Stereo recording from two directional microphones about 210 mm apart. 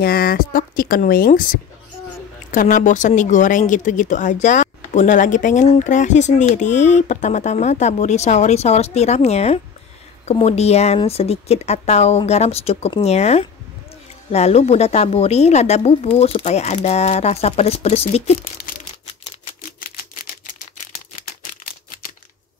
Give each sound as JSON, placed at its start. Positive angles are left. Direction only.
{"t": 0.0, "sound": "speech", "side_deg": 45}